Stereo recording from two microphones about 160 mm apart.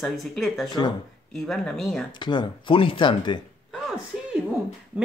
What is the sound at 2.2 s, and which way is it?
Speech, 30° left (ahead or behind).